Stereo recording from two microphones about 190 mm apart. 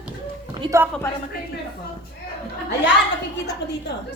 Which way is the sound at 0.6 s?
15° right (ahead or behind).